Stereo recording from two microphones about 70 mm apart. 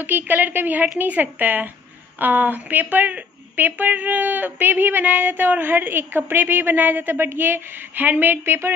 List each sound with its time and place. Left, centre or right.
0.0 s speech: right